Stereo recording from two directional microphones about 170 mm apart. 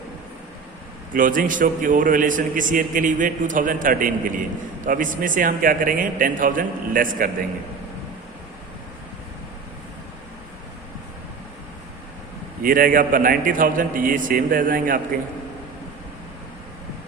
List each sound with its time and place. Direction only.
1.1 s a man's voice: 55° right (ahead or behind)
12.6 s a man's voice: 55° right (ahead or behind)